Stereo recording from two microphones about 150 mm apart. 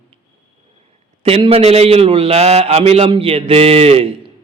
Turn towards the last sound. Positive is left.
turn(degrees=-40)  # may be behind; listen again after turning